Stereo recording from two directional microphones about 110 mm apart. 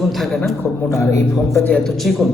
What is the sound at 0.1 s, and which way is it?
Speech, centre (ahead or behind).